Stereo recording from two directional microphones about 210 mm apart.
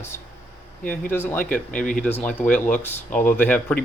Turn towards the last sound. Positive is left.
turn(degrees=5)  # may be behind; listen again after turning